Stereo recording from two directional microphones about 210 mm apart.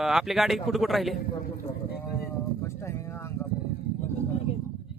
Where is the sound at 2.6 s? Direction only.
15° left (ahead or behind).